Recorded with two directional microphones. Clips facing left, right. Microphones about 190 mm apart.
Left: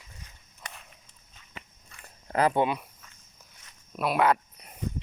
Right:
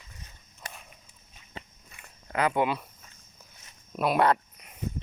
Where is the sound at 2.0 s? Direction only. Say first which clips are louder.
Left 3 dB; 35° left (ahead or behind).